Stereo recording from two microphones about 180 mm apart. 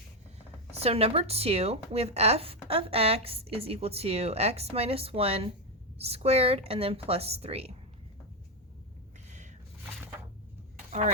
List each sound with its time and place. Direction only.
0.7 s speech: 35° right (ahead or behind)